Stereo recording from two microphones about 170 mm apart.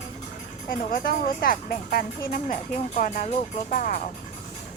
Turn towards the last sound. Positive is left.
turn(degrees=50)  # may be behind; listen again after turning